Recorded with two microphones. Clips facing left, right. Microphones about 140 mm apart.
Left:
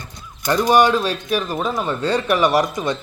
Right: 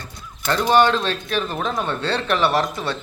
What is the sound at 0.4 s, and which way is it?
A man's voice, 10° left (ahead or behind).